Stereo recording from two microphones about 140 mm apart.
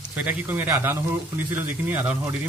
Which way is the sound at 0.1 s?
10° right (ahead or behind).